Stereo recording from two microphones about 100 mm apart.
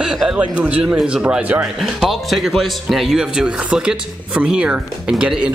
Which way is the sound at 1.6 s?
5° right (ahead or behind).